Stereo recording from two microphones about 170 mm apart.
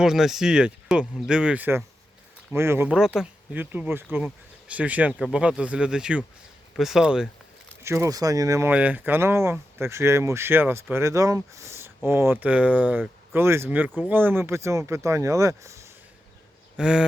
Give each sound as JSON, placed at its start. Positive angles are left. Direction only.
{"t": 0.0, "sound": "speech", "side_deg": -5}
{"t": 7.9, "sound": "speech", "side_deg": -15}
{"t": 16.7, "sound": "speech", "side_deg": -5}